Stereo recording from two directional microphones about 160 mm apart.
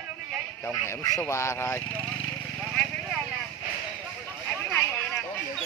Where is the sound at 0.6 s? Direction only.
15° left (ahead or behind).